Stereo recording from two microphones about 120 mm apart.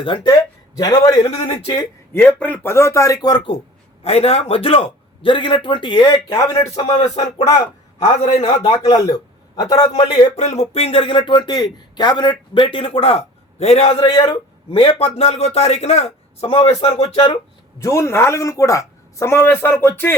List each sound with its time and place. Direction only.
0.0 s speech: 45° left (ahead or behind)
0.3 s a man's voice: 30° left (ahead or behind)
1.2 s speech: 55° left (ahead or behind)
1.6 s a man's voice: 40° left (ahead or behind)
2.1 s speech: 10° left (ahead or behind); by 3.6 s 45° left (ahead or behind)
4.0 s speech: 60° left (ahead or behind); by 6.3 s 40° left (ahead or behind)
6.8 s speech: 60° left (ahead or behind)
8.4 s a man's voice: 30° left (ahead or behind)
10.3 s speech: 70° left (ahead or behind); by 14.1 s 55° left (ahead or behind)
14.2 s speech: 40° left (ahead or behind)
17.7 s speech: 25° left (ahead or behind)